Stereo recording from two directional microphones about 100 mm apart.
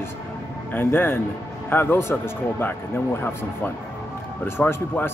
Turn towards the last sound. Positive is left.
turn(degrees=20)  # may be behind; listen again after turning